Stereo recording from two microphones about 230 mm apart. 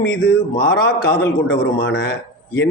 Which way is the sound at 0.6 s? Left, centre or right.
Left.